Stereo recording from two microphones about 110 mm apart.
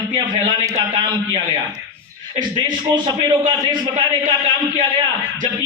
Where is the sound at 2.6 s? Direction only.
40° right (ahead or behind).